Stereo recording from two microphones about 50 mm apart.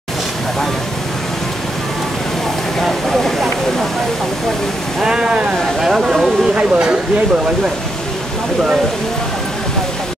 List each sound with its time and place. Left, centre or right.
2.8 s vehicle: centre
5.0 s speech: centre
6.5 s speech: centre